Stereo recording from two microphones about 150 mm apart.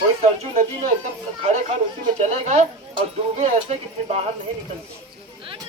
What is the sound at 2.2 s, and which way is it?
Speech, 45° right (ahead or behind).